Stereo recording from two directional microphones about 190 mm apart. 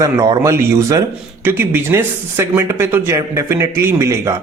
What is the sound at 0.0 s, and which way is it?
Speech, 15° right (ahead or behind).